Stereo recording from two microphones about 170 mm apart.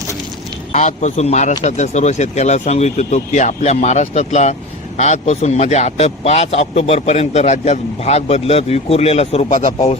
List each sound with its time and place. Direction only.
0.7 s a man's voice: 45° left (ahead or behind)